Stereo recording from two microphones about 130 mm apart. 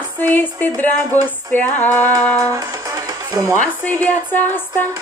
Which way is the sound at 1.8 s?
15° left (ahead or behind).